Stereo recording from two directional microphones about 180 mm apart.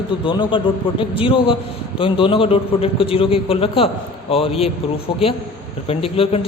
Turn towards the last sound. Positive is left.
turn(degrees=35)  # may be behind; listen again after turning